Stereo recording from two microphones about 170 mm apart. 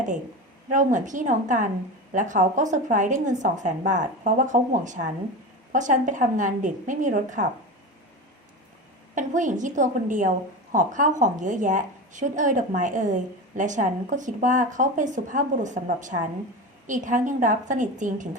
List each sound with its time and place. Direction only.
0.7 s a woman's voice: 50° right (ahead or behind)
9.1 s a woman's voice: 50° right (ahead or behind)